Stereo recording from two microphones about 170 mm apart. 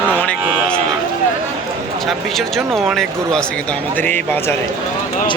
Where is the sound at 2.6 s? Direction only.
Centre (ahead or behind).